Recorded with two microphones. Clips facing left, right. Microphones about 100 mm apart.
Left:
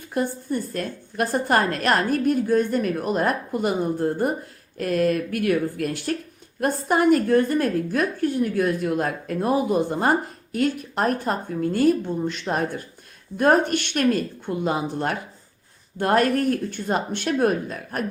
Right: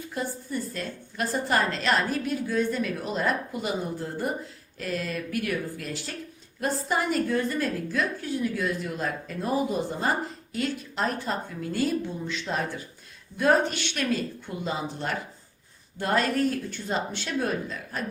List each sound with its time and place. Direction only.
0.0 s a woman's voice: 60° left (ahead or behind)